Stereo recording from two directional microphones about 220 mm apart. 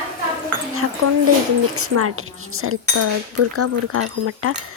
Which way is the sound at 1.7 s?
90° right.